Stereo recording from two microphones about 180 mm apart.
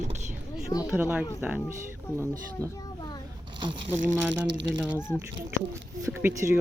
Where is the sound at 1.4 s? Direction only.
10° right (ahead or behind).